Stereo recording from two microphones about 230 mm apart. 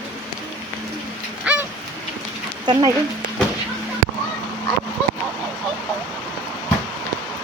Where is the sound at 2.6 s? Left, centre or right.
Centre.